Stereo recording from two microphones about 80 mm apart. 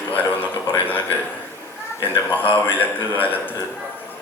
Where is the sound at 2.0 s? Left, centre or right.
Left.